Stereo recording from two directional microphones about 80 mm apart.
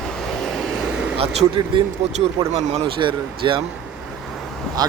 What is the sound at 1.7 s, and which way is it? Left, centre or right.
Speech, right.